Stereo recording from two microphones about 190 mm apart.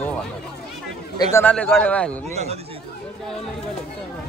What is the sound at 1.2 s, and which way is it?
Speech, 15° left (ahead or behind).